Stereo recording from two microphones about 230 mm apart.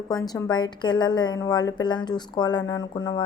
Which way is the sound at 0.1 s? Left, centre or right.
Centre.